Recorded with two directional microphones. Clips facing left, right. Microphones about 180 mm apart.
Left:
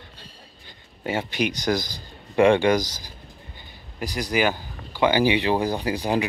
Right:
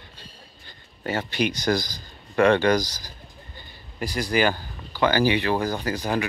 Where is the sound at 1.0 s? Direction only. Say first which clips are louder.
Even; 10° left (ahead or behind).